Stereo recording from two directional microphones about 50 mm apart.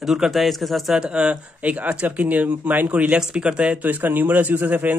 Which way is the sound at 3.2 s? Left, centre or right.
Centre.